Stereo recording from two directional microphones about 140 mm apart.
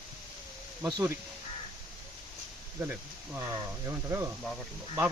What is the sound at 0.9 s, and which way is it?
Speech, 30° right (ahead or behind).